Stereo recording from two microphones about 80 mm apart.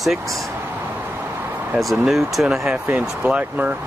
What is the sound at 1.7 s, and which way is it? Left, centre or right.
Speech, centre.